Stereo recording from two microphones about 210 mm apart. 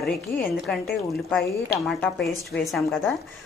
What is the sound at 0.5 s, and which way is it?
A woman's voice, centre (ahead or behind).